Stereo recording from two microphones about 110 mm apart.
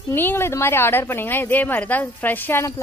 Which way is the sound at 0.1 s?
20° left (ahead or behind).